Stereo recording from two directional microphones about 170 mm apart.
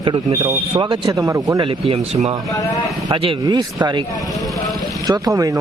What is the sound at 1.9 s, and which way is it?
A man's voice, 40° right (ahead or behind).